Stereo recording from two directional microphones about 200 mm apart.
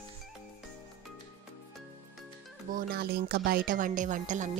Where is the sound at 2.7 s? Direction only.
50° right (ahead or behind).